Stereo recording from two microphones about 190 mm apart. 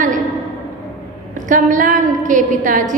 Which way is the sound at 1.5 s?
45° right (ahead or behind).